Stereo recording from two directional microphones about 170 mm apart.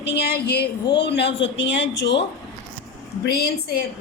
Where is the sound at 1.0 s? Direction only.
90° left.